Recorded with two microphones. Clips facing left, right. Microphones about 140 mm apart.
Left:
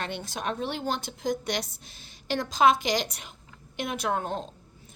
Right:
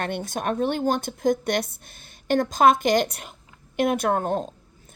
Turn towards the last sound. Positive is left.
turn(degrees=-50)  # may be behind; listen again after turning